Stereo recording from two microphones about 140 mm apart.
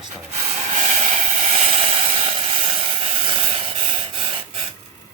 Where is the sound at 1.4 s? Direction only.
50° right (ahead or behind).